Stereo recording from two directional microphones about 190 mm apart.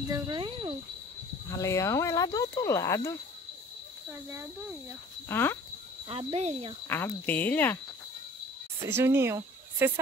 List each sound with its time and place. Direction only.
0.1 s speech: 25° right (ahead or behind)
1.5 s speech: 15° left (ahead or behind)
4.1 s speech: 15° right (ahead or behind)
5.3 s speech: 10° left (ahead or behind)
6.0 s speech: 30° right (ahead or behind)
6.9 s speech: 10° left (ahead or behind)
8.8 s speech: 15° right (ahead or behind)